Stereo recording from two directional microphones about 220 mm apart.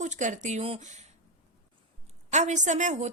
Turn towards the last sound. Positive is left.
turn(degrees=-35)  # may be behind; listen again after turning